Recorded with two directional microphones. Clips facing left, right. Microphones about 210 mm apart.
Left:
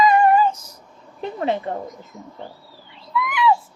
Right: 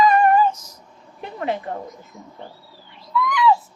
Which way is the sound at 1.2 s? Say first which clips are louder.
Left 3 dB; 25° left (ahead or behind).